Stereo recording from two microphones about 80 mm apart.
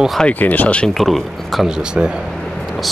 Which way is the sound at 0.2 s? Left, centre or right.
Left.